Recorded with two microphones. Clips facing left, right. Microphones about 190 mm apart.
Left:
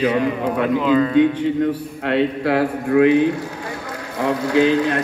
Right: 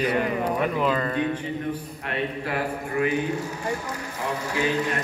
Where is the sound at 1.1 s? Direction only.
90° left.